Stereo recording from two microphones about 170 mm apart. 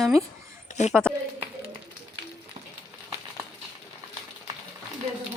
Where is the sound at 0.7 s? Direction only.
45° left (ahead or behind).